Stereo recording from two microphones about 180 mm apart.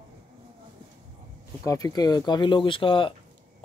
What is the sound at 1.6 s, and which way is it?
Speech, 20° left (ahead or behind).